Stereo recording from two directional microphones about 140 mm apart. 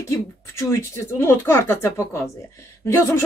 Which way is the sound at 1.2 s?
20° left (ahead or behind).